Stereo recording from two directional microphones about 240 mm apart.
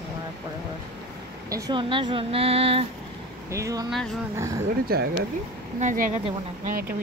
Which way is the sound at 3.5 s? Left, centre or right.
Centre.